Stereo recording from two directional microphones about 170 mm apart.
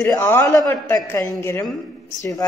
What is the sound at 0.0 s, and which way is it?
A woman's voice, 15° left (ahead or behind).